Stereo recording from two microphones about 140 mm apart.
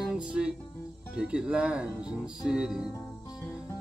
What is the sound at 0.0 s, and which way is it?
Music, 5° right (ahead or behind).